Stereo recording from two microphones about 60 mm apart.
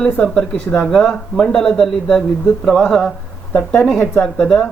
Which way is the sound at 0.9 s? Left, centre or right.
Centre.